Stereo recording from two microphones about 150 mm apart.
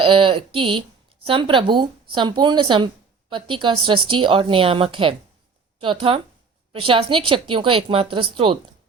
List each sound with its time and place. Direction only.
0.0 s speech: 35° right (ahead or behind)